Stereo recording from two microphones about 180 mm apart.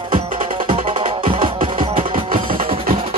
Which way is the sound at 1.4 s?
50° right (ahead or behind).